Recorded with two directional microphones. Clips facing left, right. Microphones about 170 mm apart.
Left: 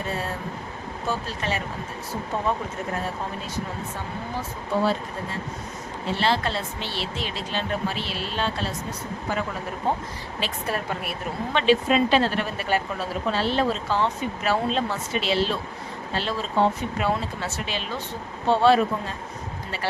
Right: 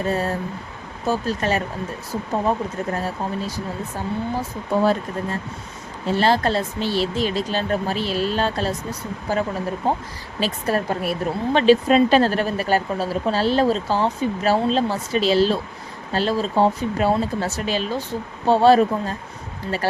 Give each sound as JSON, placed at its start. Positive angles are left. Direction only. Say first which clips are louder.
{"t": 0.1, "sound": "speech", "louder": "right 6 dB", "side_deg": -40}
{"t": 3.9, "sound": "speech", "louder": "right 6 dB", "side_deg": -40}